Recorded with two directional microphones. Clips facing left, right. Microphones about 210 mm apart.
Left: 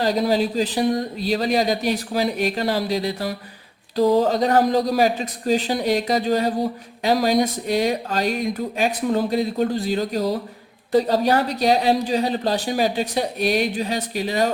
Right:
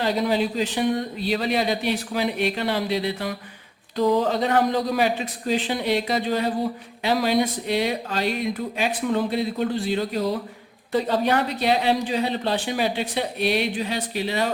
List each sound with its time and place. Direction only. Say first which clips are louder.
0.0 s speech: left 3 dB; 40° left (ahead or behind)